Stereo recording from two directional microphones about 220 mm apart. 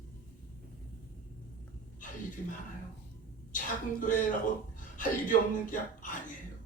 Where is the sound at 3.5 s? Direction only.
35° left (ahead or behind).